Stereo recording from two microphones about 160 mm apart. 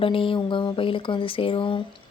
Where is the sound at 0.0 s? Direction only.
35° left (ahead or behind).